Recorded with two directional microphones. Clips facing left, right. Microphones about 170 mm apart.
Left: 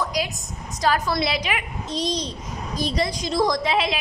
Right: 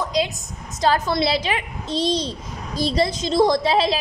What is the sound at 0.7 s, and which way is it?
A child's voice, 25° right (ahead or behind).